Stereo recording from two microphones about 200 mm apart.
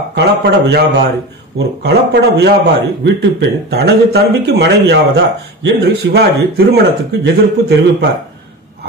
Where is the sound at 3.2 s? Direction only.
55° right (ahead or behind).